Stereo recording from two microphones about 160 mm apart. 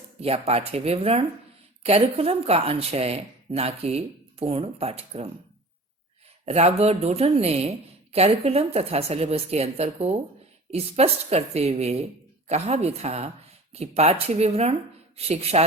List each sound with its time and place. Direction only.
0.2 s a woman's voice: 40° right (ahead or behind)
6.4 s a woman's voice: 40° right (ahead or behind)